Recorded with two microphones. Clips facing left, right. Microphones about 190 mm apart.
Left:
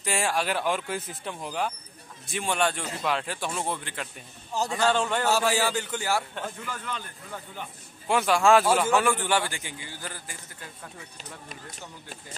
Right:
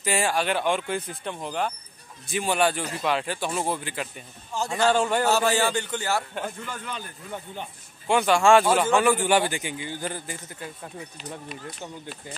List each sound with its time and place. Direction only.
0.0 s a man's voice: centre (ahead or behind)
5.3 s a man's voice: 5° left (ahead or behind); by 7.4 s 10° right (ahead or behind)
8.1 s speech: centre (ahead or behind)
9.1 s a man's voice: 15° right (ahead or behind)